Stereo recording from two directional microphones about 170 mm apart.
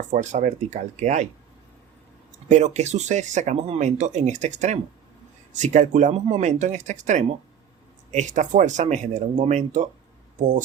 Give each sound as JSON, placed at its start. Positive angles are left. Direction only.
{"t": 0.1, "sound": "speech", "side_deg": -45}
{"t": 2.5, "sound": "speech", "side_deg": -40}